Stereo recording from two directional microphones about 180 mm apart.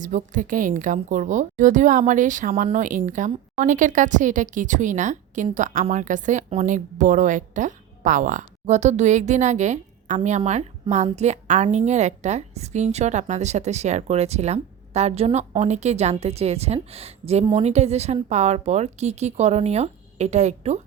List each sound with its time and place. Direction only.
0.0 s a woman's voice: 45° right (ahead or behind)